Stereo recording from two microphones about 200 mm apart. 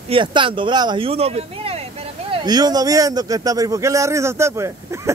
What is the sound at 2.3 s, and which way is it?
Speech, 20° right (ahead or behind).